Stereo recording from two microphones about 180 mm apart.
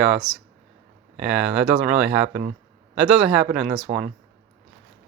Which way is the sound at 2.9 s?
5° right (ahead or behind).